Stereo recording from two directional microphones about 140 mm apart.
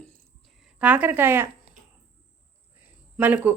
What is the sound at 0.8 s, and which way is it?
Speech, 10° right (ahead or behind).